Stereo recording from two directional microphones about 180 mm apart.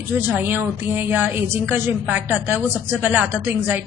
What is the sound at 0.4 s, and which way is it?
A woman's voice, 10° right (ahead or behind).